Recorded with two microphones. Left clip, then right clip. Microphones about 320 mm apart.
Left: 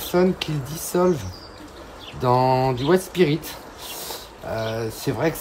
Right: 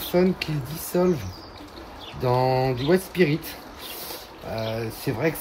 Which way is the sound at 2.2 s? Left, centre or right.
Centre.